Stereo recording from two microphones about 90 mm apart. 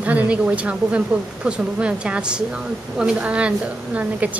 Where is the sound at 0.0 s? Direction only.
15° right (ahead or behind).